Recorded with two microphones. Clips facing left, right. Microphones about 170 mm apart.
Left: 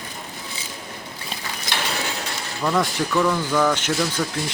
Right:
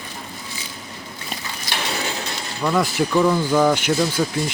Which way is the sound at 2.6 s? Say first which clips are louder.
Right 2 dB; centre (ahead or behind).